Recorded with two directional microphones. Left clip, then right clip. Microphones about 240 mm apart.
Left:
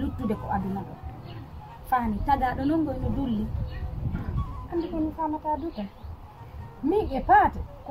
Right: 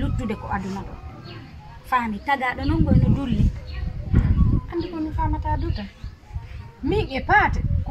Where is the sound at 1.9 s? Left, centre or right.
Centre.